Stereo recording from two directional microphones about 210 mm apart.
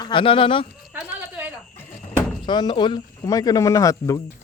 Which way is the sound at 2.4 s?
20° left (ahead or behind).